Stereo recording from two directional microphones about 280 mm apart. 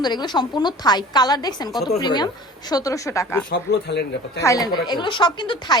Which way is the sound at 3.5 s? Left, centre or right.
Left.